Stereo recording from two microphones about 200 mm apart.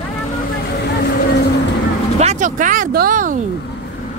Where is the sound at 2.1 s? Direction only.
35° right (ahead or behind).